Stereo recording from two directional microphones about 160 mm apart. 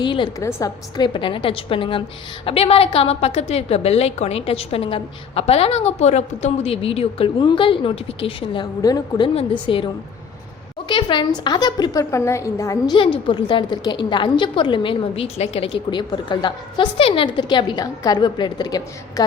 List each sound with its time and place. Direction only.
0.0 s a woman's voice: 30° left (ahead or behind)
0.3 s a woman's voice: 20° left (ahead or behind)
8.8 s a woman's voice: 25° left (ahead or behind)